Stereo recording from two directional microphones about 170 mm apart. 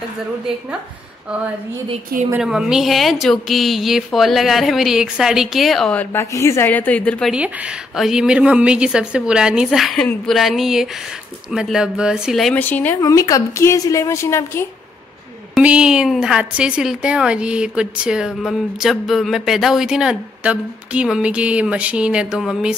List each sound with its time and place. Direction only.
2.3 s a woman's voice: 5° right (ahead or behind)
7.3 s a woman's voice: 5° right (ahead or behind)
12.5 s a woman's voice: 10° left (ahead or behind)
15.5 s a woman's voice: 5° right (ahead or behind)